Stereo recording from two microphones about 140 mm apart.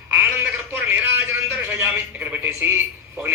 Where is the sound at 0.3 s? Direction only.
15° right (ahead or behind).